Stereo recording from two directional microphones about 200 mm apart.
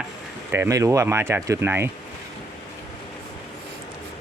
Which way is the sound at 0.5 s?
15° right (ahead or behind).